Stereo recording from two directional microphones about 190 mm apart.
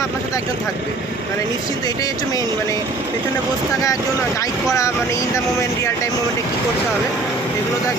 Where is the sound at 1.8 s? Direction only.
20° left (ahead or behind).